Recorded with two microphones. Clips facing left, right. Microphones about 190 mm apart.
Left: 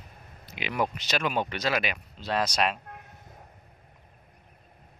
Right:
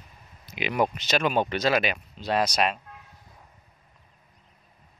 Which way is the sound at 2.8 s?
55° left (ahead or behind).